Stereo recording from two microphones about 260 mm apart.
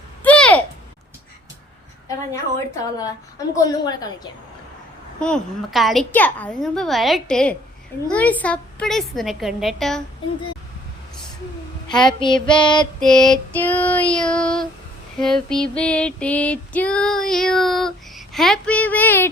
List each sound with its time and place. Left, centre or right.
0.2 s a sound: centre
2.8 s a woman's voice: centre
5.2 s female singing: centre
11.9 s a woman's voice: centre
13.0 s child singing: centre
15.2 s female singing: centre